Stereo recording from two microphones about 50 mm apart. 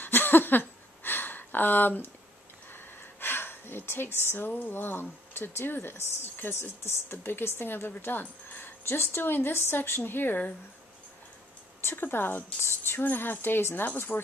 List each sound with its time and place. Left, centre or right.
0.0 s a sound: left
4.5 s speech: left
8.8 s speech: left
11.8 s speech: left
12.6 s a sound: left
13.1 s speech: left